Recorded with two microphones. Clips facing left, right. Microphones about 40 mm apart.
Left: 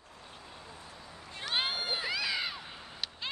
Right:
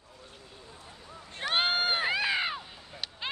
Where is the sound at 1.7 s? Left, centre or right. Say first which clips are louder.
Right 6 dB; right.